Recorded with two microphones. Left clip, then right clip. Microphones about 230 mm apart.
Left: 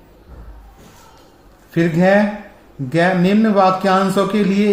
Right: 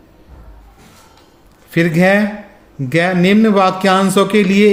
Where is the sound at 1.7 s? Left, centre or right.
Right.